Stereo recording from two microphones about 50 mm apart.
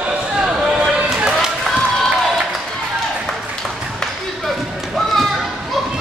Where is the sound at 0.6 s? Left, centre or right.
Centre.